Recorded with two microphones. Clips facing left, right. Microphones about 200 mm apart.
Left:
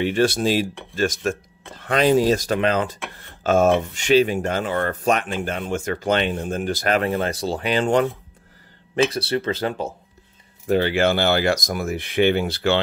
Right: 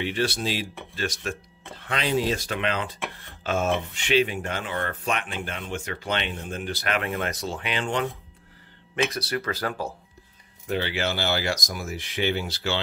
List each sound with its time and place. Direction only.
0.0 s speech: 45° left (ahead or behind)
9.1 s speech: 25° left (ahead or behind)
10.7 s speech: 45° left (ahead or behind)